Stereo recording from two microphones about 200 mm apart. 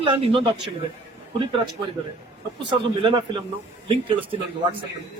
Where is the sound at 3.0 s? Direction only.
25° right (ahead or behind).